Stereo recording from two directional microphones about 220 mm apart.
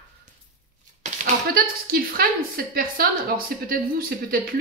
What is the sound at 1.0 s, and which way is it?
Speech, 40° right (ahead or behind).